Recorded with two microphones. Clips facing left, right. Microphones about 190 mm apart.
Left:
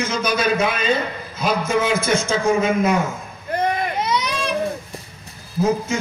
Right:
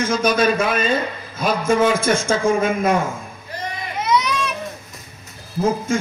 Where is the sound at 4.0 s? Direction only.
30° left (ahead or behind).